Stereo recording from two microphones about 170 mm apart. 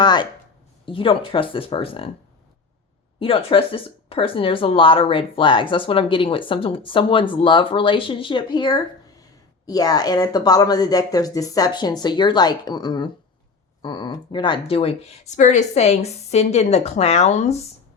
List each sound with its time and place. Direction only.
0.0 s a sound: 25° left (ahead or behind)
0.9 s speech: 30° left (ahead or behind)
3.2 s a woman's voice: 35° left (ahead or behind)